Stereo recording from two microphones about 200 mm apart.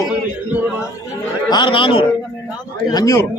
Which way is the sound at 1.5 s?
25° left (ahead or behind).